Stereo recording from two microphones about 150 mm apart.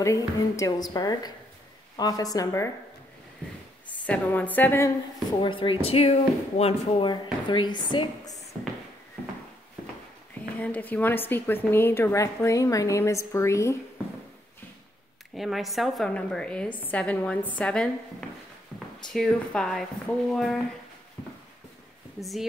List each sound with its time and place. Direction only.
0.0 s a woman's voice: 20° left (ahead or behind)
4.0 s speech: 10° left (ahead or behind)
5.4 s speech: 35° left (ahead or behind)
10.6 s speech: 10° left (ahead or behind)
15.3 s speech: centre (ahead or behind)
18.7 s a sound: centre (ahead or behind)
19.0 s speech: 5° left (ahead or behind)
22.2 s speech: centre (ahead or behind)